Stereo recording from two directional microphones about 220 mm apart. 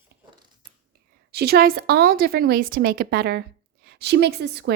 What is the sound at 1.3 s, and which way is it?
A woman's voice, 45° right (ahead or behind).